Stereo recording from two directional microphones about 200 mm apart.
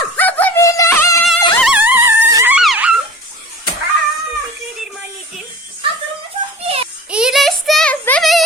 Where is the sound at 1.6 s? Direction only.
10° right (ahead or behind).